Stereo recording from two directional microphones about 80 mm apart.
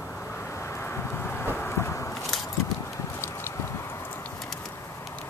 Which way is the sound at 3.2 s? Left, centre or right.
Left.